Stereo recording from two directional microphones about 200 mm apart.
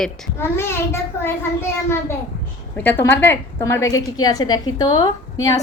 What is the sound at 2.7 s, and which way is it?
A woman's voice, 10° left (ahead or behind).